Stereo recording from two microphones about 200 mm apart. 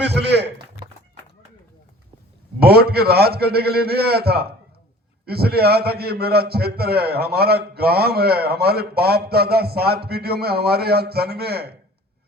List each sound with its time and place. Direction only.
0.0 s speech: 55° right (ahead or behind)
2.6 s a man's voice: 50° right (ahead or behind)